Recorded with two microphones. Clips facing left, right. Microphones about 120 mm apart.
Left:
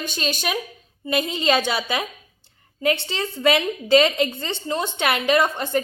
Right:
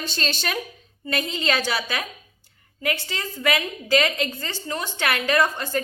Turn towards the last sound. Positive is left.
turn(degrees=20)  # may be behind; listen again after turning